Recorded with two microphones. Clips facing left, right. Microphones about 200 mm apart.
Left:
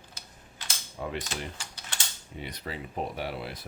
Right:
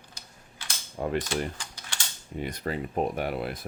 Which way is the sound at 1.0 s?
45° right (ahead or behind).